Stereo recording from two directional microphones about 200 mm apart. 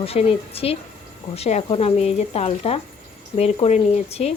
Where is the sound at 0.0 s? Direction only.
30° left (ahead or behind).